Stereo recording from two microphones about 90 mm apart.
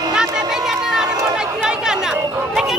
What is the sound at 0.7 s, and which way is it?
Run, 5° right (ahead or behind).